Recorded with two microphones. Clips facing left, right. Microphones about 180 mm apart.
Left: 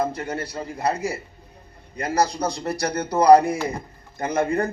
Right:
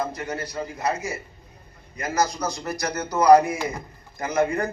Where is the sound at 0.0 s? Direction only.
30° left (ahead or behind).